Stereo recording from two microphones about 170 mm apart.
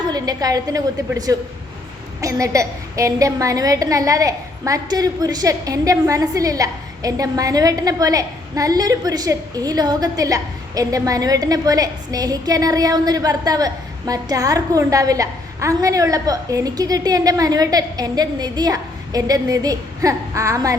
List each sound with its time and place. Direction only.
0.1 s a woman's voice: 20° right (ahead or behind)